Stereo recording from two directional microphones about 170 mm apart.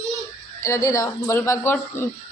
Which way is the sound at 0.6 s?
20° left (ahead or behind).